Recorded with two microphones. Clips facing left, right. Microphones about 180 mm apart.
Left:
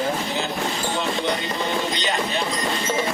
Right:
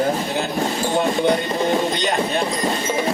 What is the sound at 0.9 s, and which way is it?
Speech, 55° right (ahead or behind).